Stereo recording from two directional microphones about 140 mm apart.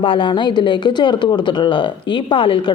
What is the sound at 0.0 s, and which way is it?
A woman's voice, 35° left (ahead or behind).